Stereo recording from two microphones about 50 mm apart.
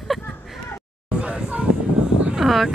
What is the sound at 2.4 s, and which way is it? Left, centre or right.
Speech, centre.